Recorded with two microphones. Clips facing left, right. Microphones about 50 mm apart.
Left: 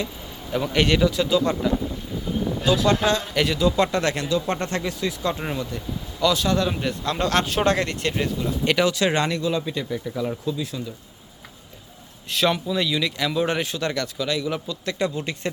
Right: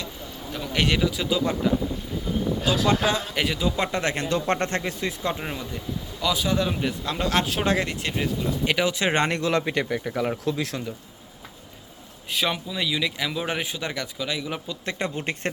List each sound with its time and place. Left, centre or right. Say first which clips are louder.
0.7 s speech: left 3 dB; centre
2.6 s speech: left 3 dB; centre
4.3 s speech: left 1 dB; right
4.5 s speech: even; right
5.4 s speech: left 3 dB; centre; by 9.4 s right
9.4 s speech: right 1 dB; right
10.4 s speech: right 1 dB; right
12.3 s speech: left 5 dB; centre
14.8 s speech: left 2 dB; right